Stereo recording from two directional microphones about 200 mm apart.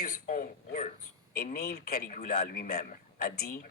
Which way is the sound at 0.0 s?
45° left (ahead or behind).